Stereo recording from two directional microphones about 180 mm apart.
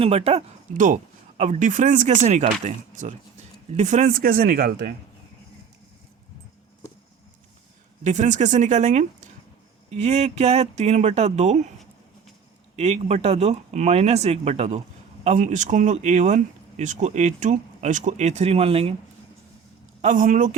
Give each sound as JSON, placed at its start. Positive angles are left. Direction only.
{"t": 0.0, "sound": "speech", "side_deg": -35}
{"t": 8.0, "sound": "speech", "side_deg": -40}
{"t": 12.7, "sound": "speech", "side_deg": -35}
{"t": 20.0, "sound": "speech", "side_deg": -45}